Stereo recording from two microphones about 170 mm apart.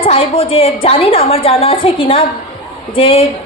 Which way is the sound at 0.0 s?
35° left (ahead or behind).